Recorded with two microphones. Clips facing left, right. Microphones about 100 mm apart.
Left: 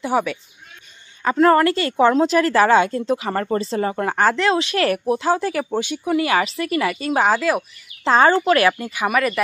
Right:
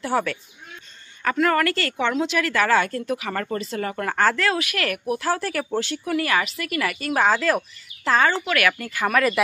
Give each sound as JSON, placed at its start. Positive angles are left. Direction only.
{"t": 0.0, "sound": "speech", "side_deg": 15}
{"t": 1.2, "sound": "a woman's voice", "side_deg": 30}
{"t": 2.0, "sound": "a woman's voice", "side_deg": 35}
{"t": 7.2, "sound": "speech", "side_deg": 10}
{"t": 8.0, "sound": "speech", "side_deg": 30}
{"t": 8.3, "sound": "speech", "side_deg": 40}
{"t": 8.5, "sound": "speech", "side_deg": 25}